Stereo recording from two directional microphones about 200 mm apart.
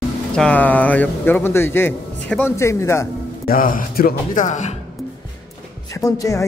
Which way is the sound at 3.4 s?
45° left (ahead or behind).